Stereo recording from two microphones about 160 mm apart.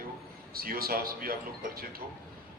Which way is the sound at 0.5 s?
65° right (ahead or behind).